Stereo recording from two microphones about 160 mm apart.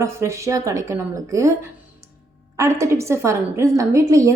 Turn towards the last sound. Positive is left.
turn(degrees=-20)  # may be behind; listen again after turning